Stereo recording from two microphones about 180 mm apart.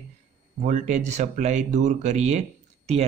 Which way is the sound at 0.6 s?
45° right (ahead or behind).